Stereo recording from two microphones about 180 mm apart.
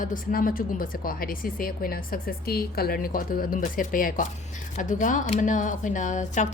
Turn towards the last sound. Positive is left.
turn(degrees=40)  # may be behind; listen again after turning